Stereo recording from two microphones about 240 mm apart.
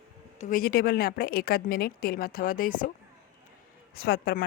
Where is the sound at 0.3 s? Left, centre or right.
Left.